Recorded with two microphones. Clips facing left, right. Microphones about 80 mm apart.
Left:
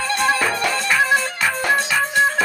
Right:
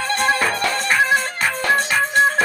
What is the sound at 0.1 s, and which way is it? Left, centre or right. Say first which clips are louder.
Music: even; right.